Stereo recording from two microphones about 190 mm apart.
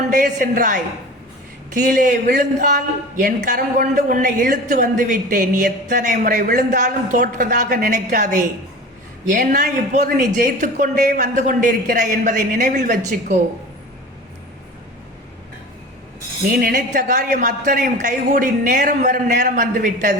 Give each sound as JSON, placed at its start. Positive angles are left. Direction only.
{"t": 0.1, "sound": "a man's voice", "side_deg": -45}
{"t": 9.4, "sound": "a man's voice", "side_deg": -50}
{"t": 16.5, "sound": "a man's voice", "side_deg": -50}